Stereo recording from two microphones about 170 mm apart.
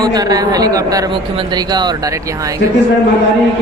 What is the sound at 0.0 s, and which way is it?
Speech, 25° right (ahead or behind).